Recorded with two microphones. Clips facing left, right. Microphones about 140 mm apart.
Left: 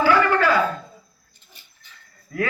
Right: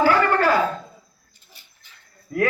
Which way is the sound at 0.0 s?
45° right (ahead or behind).